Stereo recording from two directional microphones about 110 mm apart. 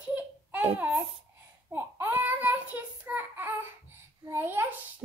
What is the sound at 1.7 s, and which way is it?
Child singing, 15° right (ahead or behind).